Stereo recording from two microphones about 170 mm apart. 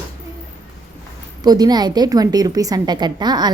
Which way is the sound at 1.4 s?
25° right (ahead or behind).